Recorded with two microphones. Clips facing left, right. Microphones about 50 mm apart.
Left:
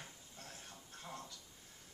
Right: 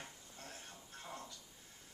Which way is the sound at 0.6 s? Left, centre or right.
Right.